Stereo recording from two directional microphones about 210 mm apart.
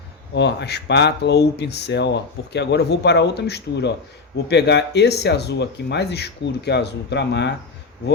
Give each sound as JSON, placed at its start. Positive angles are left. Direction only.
{"t": 0.3, "sound": "speech", "side_deg": 55}